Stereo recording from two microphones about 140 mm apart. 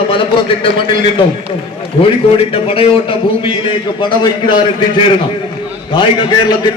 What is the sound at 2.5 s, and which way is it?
A man's voice, 40° left (ahead or behind).